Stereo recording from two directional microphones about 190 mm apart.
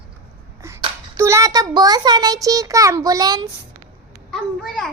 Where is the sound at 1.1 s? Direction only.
15° right (ahead or behind).